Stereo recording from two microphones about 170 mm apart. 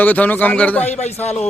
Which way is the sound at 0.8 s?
40° left (ahead or behind).